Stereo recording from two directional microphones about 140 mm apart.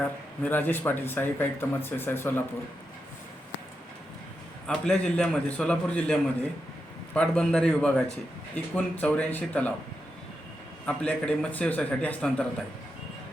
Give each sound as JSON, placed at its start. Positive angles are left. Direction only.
{"t": 0.4, "sound": "speech", "side_deg": 15}
{"t": 4.6, "sound": "speech", "side_deg": 5}
{"t": 10.8, "sound": "speech", "side_deg": 10}